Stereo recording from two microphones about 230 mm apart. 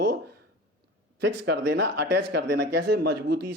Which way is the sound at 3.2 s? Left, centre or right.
Right.